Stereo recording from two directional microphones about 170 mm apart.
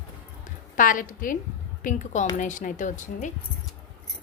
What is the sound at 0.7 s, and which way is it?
A woman's voice, 50° left (ahead or behind).